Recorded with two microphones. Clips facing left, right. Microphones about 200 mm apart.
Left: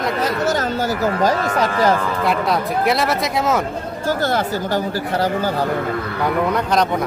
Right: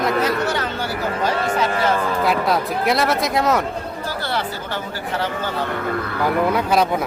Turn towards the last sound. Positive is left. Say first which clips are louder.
# even
turn(degrees=-5)  # may be behind; listen again after turning